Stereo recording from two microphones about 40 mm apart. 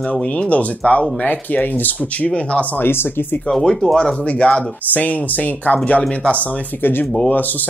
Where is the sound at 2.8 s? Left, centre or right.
Left.